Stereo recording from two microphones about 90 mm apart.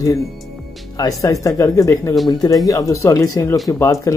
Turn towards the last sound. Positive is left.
turn(degrees=35)  # may be behind; listen again after turning